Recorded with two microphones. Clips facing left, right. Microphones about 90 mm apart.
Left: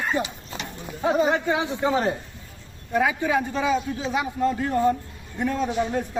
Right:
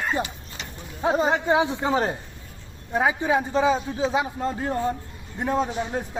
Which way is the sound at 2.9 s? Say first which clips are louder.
Even; 25° right (ahead or behind).